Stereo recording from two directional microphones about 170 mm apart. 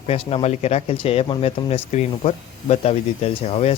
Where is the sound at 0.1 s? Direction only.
35° left (ahead or behind).